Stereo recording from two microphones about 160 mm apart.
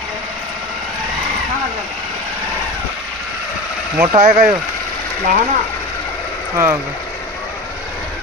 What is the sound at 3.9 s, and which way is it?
Speech, 15° right (ahead or behind).